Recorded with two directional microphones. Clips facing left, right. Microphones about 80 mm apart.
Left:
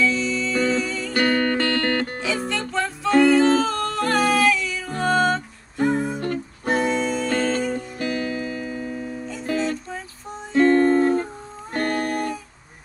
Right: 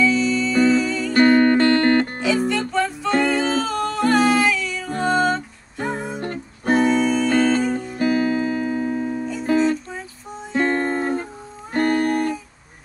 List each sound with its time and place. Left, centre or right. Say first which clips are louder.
0.0 s music: right 4 dB; centre
1.1 s music: right 6 dB; right
2.2 s music: right 5 dB; centre
6.1 s music: left 2 dB; right
6.7 s music: right 4 dB; centre
8.0 s music: right 8 dB; right
9.6 s music: right 5 dB; centre
10.5 s music: left 5 dB; centre
12.0 s music: right 4 dB; centre